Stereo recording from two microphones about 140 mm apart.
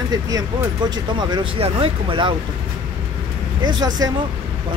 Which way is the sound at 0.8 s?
30° right (ahead or behind).